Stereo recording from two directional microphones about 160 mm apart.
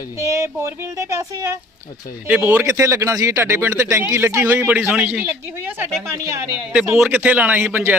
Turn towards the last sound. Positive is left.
turn(degrees=-10)  # may be behind; listen again after turning